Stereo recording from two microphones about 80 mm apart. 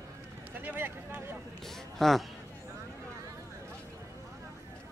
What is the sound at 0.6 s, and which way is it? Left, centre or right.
Speech, right.